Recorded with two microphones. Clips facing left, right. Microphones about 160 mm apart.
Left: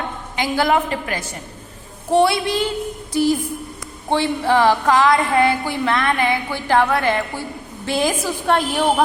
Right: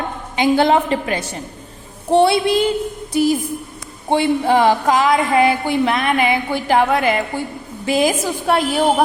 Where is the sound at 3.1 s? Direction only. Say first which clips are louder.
Right 1 dB; 15° right (ahead or behind).